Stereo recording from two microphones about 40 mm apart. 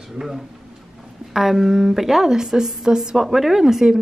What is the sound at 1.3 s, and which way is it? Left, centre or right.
A woman's voice, centre.